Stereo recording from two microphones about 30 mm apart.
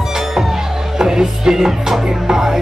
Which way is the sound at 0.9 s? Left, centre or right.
Right.